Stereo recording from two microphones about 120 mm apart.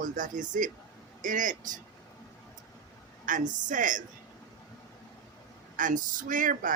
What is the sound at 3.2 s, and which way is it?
Speech, 90° right.